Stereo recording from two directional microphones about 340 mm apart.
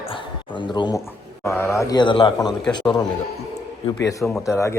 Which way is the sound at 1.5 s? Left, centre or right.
Centre.